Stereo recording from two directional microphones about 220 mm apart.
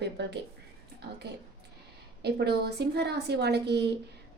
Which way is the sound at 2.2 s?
45° right (ahead or behind).